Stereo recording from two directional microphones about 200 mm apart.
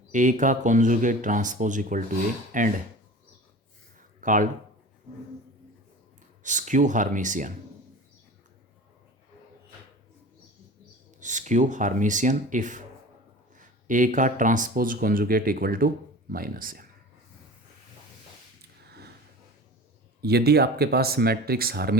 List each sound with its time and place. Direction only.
0.1 s speech: 40° right (ahead or behind)
4.2 s speech: 40° right (ahead or behind)
6.4 s speech: 40° right (ahead or behind)
11.2 s speech: 40° right (ahead or behind)
18.9 s sniff: 55° right (ahead or behind)
20.2 s speech: 55° right (ahead or behind)